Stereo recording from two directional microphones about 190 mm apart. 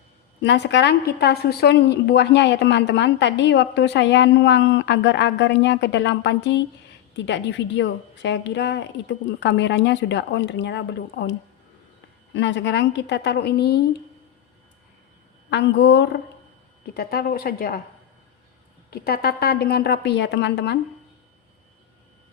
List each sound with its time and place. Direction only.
0.4 s a woman's voice: 70° left (ahead or behind)
15.4 s a woman's voice: 65° left (ahead or behind); by 17.7 s 50° left (ahead or behind)
18.9 s a woman's voice: 55° left (ahead or behind)